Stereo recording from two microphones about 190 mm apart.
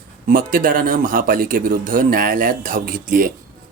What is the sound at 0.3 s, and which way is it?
Speech, 45° right (ahead or behind).